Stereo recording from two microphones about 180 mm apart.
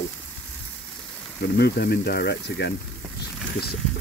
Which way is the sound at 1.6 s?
60° left (ahead or behind).